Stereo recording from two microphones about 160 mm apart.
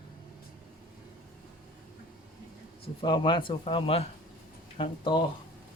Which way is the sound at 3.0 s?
30° left (ahead or behind).